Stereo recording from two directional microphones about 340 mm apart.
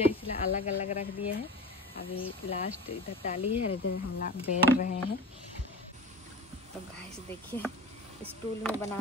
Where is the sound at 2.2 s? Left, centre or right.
Centre.